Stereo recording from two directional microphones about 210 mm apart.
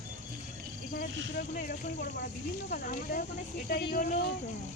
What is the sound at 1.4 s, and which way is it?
Speech, 40° left (ahead or behind).